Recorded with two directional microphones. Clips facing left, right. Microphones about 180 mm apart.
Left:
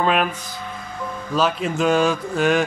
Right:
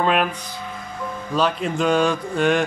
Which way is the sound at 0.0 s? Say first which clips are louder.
Even; centre (ahead or behind).